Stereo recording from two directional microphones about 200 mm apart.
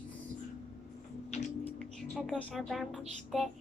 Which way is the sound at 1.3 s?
35° left (ahead or behind).